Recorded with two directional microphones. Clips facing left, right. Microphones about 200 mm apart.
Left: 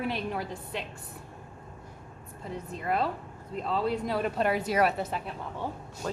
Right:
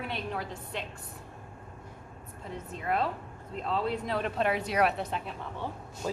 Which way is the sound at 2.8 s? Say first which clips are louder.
Left 1 dB; centre (ahead or behind).